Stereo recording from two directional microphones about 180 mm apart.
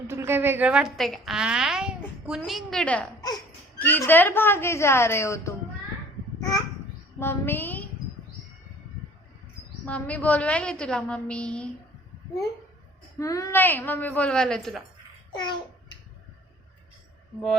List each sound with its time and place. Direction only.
0.1 s a woman's voice: 15° right (ahead or behind); by 5.5 s 15° left (ahead or behind)
7.2 s a sound: 10° left (ahead or behind)
9.8 s speech: 5° left (ahead or behind)
13.1 s speech: 20° left (ahead or behind); by 14.8 s centre (ahead or behind)
15.3 s babbling: 25° left (ahead or behind)